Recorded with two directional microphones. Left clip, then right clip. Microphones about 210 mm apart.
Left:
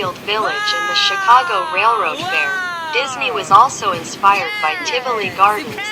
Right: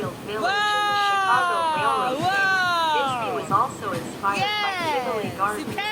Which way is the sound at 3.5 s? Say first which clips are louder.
Left 13 dB; 45° left (ahead or behind).